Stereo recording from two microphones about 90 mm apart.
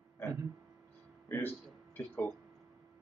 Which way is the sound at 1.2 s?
25° left (ahead or behind).